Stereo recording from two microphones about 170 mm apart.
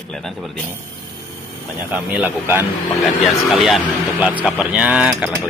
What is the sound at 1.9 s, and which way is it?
Speech, 10° right (ahead or behind).